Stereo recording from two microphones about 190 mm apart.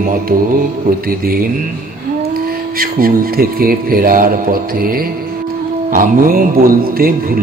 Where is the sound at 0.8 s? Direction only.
50° right (ahead or behind).